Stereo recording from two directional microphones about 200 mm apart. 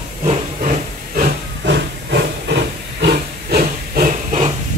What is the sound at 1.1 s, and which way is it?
Hiss, 55° right (ahead or behind).